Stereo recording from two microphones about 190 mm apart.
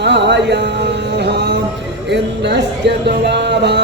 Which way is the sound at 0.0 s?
65° right (ahead or behind).